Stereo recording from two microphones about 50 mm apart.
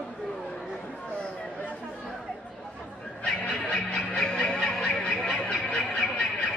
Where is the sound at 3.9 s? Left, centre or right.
Centre.